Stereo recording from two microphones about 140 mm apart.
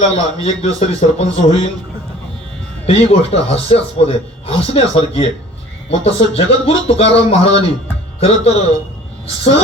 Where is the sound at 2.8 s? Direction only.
45° left (ahead or behind).